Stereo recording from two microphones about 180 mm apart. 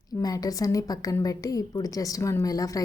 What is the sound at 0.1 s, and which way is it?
A woman's voice, 20° left (ahead or behind).